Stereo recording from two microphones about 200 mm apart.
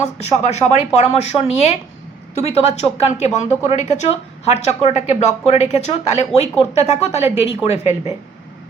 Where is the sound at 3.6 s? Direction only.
35° left (ahead or behind).